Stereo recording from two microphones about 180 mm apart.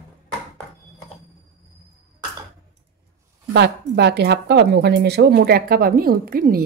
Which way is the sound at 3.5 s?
70° right (ahead or behind).